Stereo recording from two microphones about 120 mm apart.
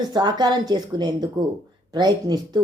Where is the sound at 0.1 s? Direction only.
35° right (ahead or behind).